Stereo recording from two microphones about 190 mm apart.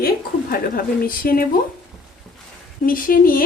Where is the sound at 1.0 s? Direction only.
50° left (ahead or behind).